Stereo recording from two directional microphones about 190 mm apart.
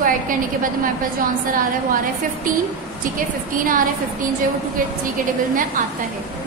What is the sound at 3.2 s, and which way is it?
Speech, 45° right (ahead or behind).